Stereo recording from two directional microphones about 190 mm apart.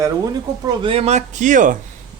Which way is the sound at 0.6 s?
25° right (ahead or behind).